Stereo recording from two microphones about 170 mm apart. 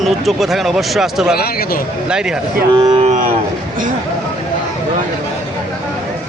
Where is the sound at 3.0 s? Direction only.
40° right (ahead or behind).